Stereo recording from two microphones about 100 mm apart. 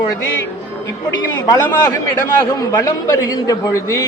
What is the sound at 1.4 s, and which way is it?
Speech, 35° left (ahead or behind).